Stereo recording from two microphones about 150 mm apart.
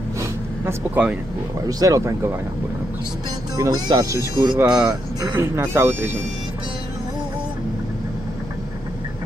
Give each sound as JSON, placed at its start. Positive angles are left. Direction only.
{"t": 0.2, "sound": "vehicle", "side_deg": -10}
{"t": 1.7, "sound": "speech", "side_deg": -25}
{"t": 3.5, "sound": "speech", "side_deg": -25}
{"t": 4.6, "sound": "speech", "side_deg": -5}
{"t": 5.2, "sound": "speech", "side_deg": -15}